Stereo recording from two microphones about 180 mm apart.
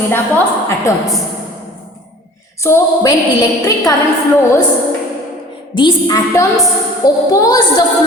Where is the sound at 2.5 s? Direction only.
15° left (ahead or behind).